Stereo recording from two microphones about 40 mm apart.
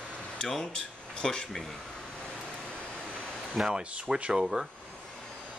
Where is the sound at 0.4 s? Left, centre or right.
Centre.